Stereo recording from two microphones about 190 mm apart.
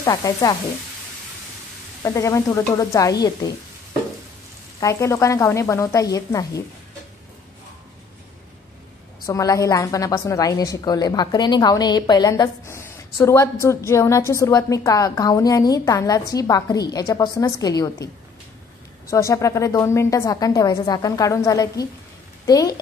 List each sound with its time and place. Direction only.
0.0 s sizzle: 20° left (ahead or behind)
2.0 s a woman's voice: 15° left (ahead or behind)
4.7 s a woman's voice: 15° left (ahead or behind)
9.2 s a woman's voice: 20° left (ahead or behind)
22.5 s sizzle: 20° left (ahead or behind)